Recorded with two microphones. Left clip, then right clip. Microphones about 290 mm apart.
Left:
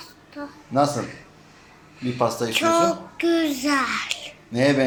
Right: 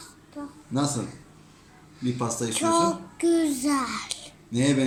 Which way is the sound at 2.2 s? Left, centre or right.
Centre.